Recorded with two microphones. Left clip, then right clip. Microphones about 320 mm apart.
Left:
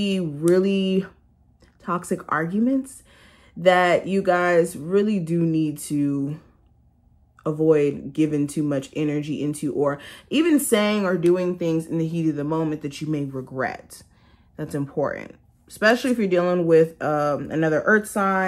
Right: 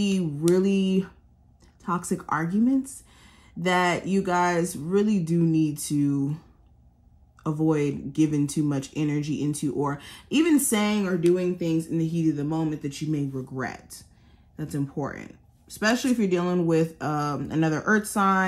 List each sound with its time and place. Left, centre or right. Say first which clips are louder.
0.0 s speech: left 3 dB; centre
7.4 s speech: left 6 dB; centre